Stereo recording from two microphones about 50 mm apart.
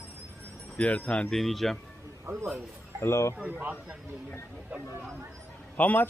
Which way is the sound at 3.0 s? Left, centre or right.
Left.